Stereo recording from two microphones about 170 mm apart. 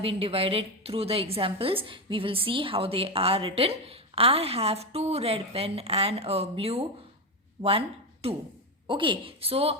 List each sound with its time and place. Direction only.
0.0 s a woman's voice: 35° right (ahead or behind)